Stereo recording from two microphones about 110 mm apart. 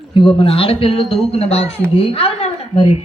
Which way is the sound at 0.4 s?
60° left (ahead or behind).